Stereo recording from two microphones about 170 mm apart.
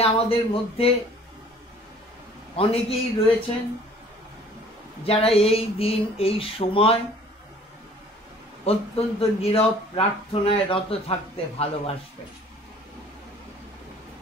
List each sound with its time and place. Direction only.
0.0 s speech: 35° left (ahead or behind)
2.5 s speech: 35° left (ahead or behind)
5.0 s speech: 35° left (ahead or behind)
8.6 s speech: 35° left (ahead or behind)